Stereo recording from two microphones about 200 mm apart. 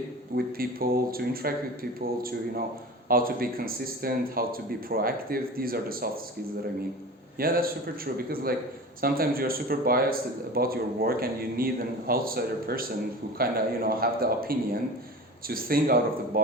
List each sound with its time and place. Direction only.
0.3 s a man's voice: 45° right (ahead or behind)
3.1 s a man's voice: 45° right (ahead or behind)
7.3 s a man's voice: 45° right (ahead or behind)